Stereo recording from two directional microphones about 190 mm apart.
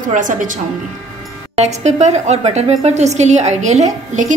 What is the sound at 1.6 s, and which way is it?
A woman's voice, 35° right (ahead or behind).